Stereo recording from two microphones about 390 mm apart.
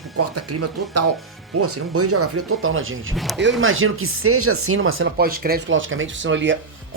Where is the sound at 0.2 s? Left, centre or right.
Right.